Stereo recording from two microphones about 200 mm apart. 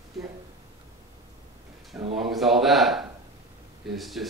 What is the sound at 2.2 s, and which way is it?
A man's voice, centre (ahead or behind).